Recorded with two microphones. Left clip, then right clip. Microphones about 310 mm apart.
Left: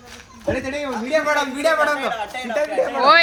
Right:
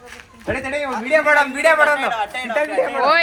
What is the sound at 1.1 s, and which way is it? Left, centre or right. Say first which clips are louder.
Speech: right 5 dB; right.